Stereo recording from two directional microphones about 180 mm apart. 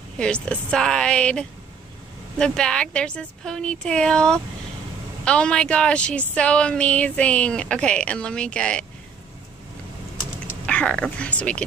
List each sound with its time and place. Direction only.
0.2 s speech: 5° left (ahead or behind)
10.7 s speech: 5° left (ahead or behind)